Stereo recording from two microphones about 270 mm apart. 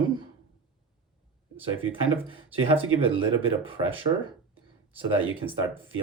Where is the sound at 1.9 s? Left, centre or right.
Right.